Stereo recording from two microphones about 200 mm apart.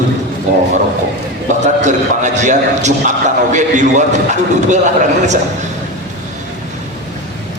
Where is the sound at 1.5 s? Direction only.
35° right (ahead or behind).